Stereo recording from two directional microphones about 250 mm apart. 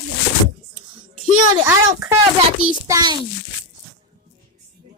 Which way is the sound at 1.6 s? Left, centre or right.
Centre.